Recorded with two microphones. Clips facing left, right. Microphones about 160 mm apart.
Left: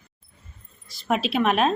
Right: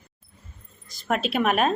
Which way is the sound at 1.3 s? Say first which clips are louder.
Left 1 dB; 5° right (ahead or behind).